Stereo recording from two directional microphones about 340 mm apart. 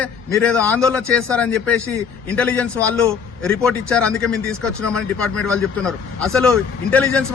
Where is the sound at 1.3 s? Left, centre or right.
Centre.